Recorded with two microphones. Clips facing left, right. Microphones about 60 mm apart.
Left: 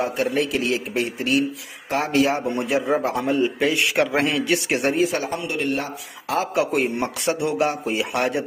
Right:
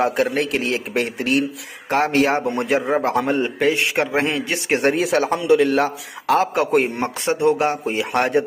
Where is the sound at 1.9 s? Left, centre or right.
Right.